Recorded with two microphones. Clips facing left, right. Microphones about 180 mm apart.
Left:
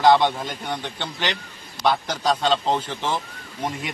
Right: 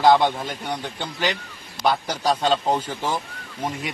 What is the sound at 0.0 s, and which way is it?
A man's voice, 5° right (ahead or behind).